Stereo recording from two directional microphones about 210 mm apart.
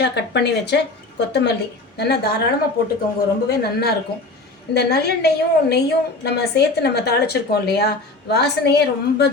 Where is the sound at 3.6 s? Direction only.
50° left (ahead or behind).